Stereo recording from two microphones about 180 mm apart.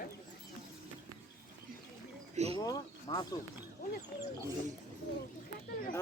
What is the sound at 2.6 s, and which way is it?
Speech, 20° left (ahead or behind).